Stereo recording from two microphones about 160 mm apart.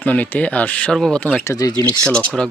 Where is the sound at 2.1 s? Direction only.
5° left (ahead or behind).